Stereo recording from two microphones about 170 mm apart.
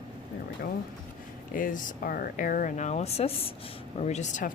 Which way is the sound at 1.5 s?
55° left (ahead or behind).